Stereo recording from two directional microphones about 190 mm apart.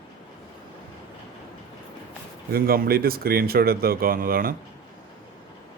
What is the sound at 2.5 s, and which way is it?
Speech, 50° right (ahead or behind).